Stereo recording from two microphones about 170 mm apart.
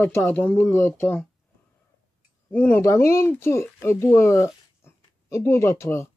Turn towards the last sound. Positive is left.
turn(degrees=15)  # may be behind; listen again after turning